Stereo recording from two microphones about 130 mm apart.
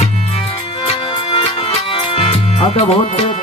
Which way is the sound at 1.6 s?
40° left (ahead or behind).